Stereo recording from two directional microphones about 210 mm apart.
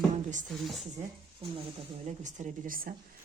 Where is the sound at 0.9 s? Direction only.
25° right (ahead or behind).